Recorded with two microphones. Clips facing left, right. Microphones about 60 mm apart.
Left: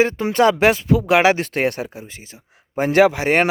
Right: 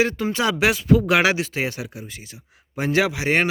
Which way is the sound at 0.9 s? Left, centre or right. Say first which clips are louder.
Left 2 dB; left.